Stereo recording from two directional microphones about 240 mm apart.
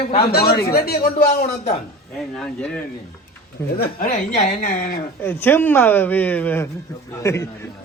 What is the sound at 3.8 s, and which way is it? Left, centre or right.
Speech, left.